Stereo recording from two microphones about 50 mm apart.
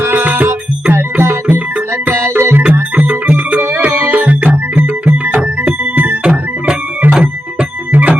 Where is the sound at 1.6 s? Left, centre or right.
Right.